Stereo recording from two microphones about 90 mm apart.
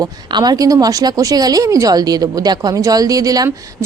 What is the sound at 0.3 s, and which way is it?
Speech, 50° right (ahead or behind).